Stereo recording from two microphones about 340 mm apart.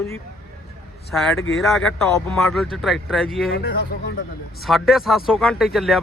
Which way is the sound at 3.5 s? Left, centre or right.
Left.